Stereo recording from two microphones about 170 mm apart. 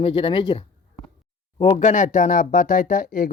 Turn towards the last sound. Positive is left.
turn(degrees=55)  # may be behind; listen again after turning